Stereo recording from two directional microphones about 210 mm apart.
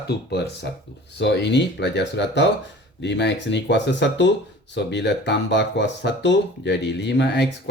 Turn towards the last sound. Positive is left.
turn(degrees=55)  # may be behind; listen again after turning